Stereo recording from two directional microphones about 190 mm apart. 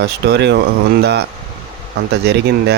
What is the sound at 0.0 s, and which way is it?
Speech, 60° right (ahead or behind).